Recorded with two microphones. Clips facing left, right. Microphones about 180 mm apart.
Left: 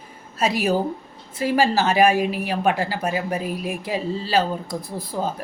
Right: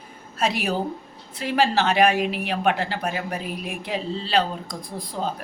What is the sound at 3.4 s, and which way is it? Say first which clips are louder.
Speech: left 4 dB; 40° left (ahead or behind).